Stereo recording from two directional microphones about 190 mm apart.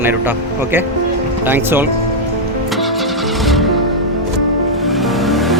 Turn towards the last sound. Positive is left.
turn(degrees=0)  # may be behind; listen again after turning